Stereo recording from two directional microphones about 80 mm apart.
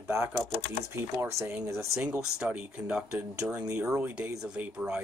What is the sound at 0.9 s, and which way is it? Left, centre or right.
Speech, right.